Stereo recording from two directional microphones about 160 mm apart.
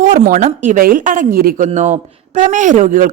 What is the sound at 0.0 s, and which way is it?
A man's voice, 60° right (ahead or behind).